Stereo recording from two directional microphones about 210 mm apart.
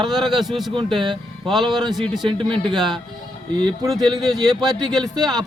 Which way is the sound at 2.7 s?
Centre (ahead or behind).